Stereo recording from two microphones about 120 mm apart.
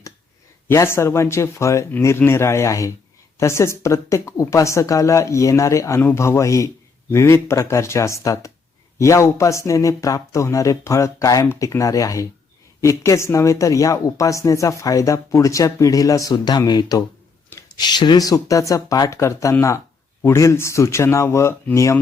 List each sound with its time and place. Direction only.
0.7 s speech: 20° left (ahead or behind)